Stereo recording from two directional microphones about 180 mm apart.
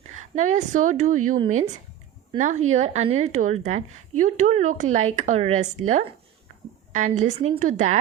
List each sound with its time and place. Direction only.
0.2 s speech: 45° right (ahead or behind)
2.4 s a woman's voice: 40° right (ahead or behind)